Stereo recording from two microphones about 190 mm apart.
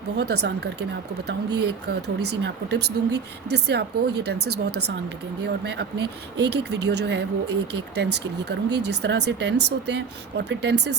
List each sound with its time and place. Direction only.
0.2 s speech: 60° right (ahead or behind)